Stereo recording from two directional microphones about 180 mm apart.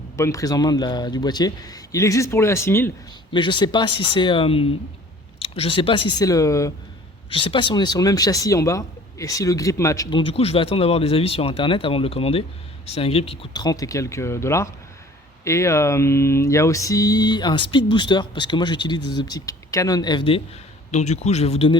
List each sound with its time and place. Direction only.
0.2 s speech: 20° left (ahead or behind)
3.3 s speech: 25° left (ahead or behind)
7.3 s speech: 30° left (ahead or behind)
20.9 s speech: 40° left (ahead or behind)